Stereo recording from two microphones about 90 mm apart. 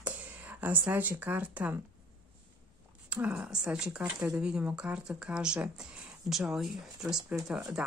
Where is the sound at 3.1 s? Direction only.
15° right (ahead or behind).